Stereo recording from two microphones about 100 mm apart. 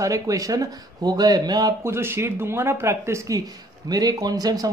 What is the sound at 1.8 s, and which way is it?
Speech, 25° right (ahead or behind).